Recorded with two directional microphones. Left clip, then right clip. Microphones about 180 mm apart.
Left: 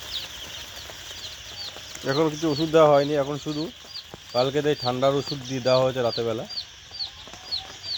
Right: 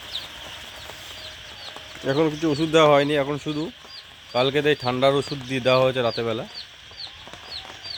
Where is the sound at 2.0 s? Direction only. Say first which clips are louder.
Right 2 dB; 10° right (ahead or behind).